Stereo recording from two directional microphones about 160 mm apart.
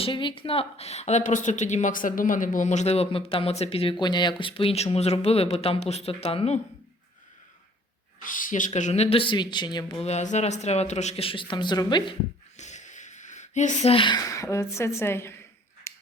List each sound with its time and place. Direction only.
0.0 s speech: 30° left (ahead or behind)
8.2 s speech: 55° left (ahead or behind); by 10.0 s 30° left (ahead or behind)
10.0 s speech: 45° left (ahead or behind); by 12.1 s 30° left (ahead or behind)
12.5 s a sound: 45° left (ahead or behind)
13.9 s a woman's voice: 30° left (ahead or behind)
15.9 s scissors: 15° left (ahead or behind)